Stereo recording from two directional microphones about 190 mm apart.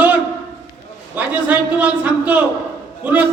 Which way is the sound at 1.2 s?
10° right (ahead or behind).